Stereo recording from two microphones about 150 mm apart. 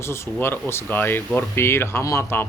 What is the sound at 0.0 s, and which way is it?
Speech, 15° left (ahead or behind).